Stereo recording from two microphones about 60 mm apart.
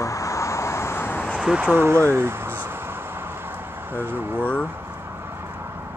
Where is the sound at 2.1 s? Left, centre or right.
Right.